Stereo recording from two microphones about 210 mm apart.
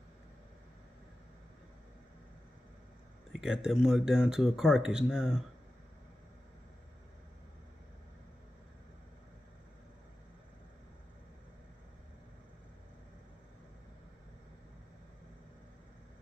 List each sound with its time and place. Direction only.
3.3 s speech: centre (ahead or behind)